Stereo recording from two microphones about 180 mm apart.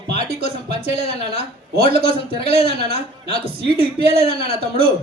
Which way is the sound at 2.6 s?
60° right (ahead or behind).